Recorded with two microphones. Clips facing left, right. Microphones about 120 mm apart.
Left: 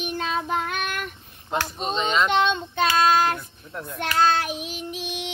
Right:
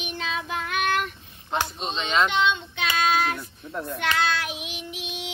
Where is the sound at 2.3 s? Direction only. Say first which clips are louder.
Left 2 dB; 45° left (ahead or behind).